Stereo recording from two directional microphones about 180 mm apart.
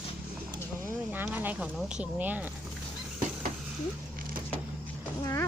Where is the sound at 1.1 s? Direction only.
10° right (ahead or behind).